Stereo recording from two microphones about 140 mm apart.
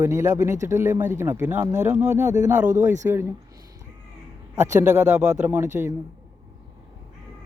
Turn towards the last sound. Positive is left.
turn(degrees=-15)  # may be behind; listen again after turning